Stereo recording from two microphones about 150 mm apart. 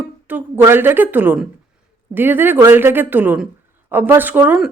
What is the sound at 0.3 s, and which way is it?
Speech, 10° right (ahead or behind).